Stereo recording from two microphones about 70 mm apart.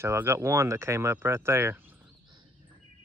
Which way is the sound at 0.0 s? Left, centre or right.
Right.